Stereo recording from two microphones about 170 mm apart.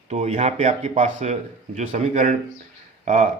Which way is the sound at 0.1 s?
40° right (ahead or behind).